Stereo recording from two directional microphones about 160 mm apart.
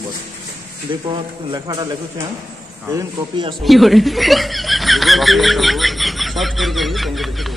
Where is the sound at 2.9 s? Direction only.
25° right (ahead or behind).